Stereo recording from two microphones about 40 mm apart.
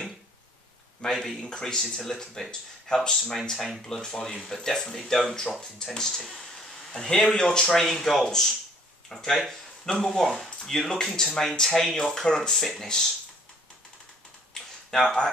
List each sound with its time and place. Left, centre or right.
1.0 s a sound: left
1.4 s speech: centre
7.7 s speech: centre
14.5 s computer keyboard: centre